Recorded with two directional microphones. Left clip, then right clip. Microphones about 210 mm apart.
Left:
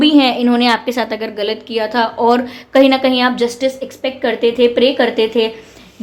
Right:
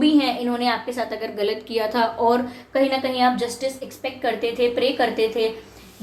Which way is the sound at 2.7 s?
45° left (ahead or behind).